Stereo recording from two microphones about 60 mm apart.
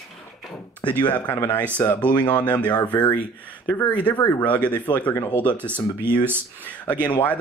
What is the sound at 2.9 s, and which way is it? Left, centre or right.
Speech, left.